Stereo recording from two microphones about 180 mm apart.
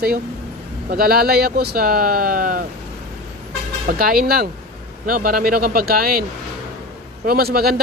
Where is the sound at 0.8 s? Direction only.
55° right (ahead or behind).